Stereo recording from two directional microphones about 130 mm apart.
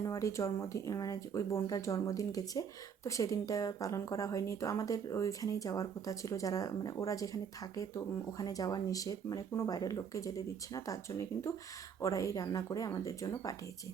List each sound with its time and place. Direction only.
0.0 s speech: 25° left (ahead or behind)